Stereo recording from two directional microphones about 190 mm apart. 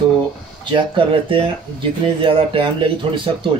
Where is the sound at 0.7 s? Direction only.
25° right (ahead or behind).